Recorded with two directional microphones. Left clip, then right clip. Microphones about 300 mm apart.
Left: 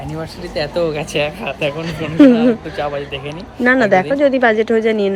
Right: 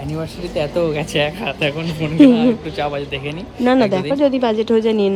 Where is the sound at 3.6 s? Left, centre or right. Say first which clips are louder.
Left 3 dB; centre.